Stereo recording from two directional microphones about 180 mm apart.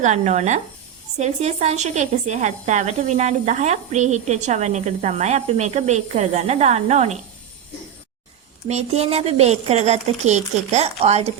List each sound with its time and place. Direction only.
0.0 s a woman's voice: 40° right (ahead or behind)
8.6 s a woman's voice: 35° right (ahead or behind)